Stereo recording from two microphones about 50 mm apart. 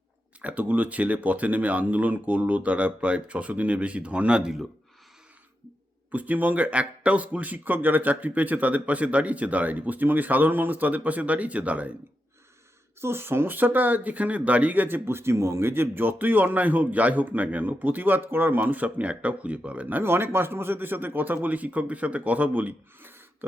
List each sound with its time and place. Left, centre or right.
0.4 s speech: right
6.1 s speech: right
13.0 s speech: right
20.0 s speech: right